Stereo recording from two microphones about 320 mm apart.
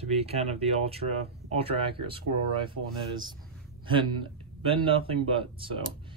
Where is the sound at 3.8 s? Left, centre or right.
Centre.